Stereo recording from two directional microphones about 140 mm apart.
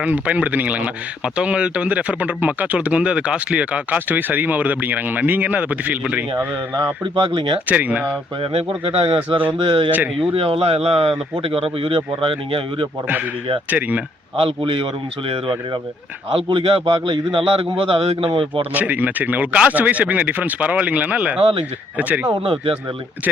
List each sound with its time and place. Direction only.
0.0 s speech: 10° right (ahead or behind)
6.7 s a man's voice: 30° right (ahead or behind)
7.7 s speech: 10° right (ahead or behind)
8.4 s a man's voice: 45° right (ahead or behind)
13.7 s speech: 10° right (ahead or behind)
14.3 s a man's voice: 40° right (ahead or behind)
18.7 s speech: 10° right (ahead or behind)